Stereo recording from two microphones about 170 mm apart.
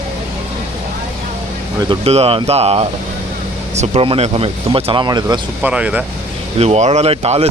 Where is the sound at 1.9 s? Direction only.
35° right (ahead or behind).